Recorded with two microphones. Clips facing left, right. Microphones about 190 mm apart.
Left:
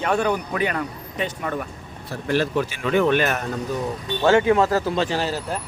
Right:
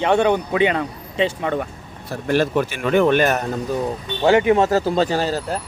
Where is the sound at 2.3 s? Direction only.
50° right (ahead or behind).